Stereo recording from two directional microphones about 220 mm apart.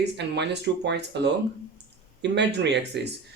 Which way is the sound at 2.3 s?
50° right (ahead or behind).